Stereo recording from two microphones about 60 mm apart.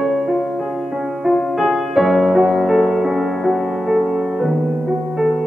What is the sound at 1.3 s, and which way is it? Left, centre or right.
Music, centre.